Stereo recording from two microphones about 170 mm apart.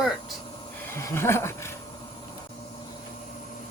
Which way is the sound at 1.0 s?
15° left (ahead or behind).